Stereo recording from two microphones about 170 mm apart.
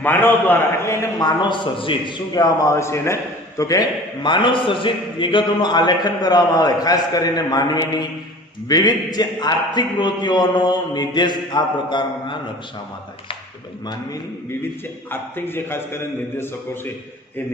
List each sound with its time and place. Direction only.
0.0 s a man's voice: 10° left (ahead or behind); by 12.4 s 25° left (ahead or behind)
15.1 s a man's voice: 15° left (ahead or behind)